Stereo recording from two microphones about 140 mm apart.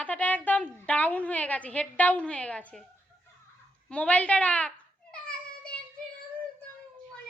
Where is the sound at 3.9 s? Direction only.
10° left (ahead or behind).